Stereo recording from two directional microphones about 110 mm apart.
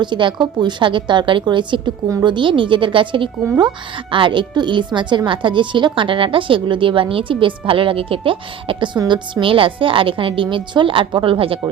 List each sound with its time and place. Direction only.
0.0 s a woman's voice: 45° right (ahead or behind)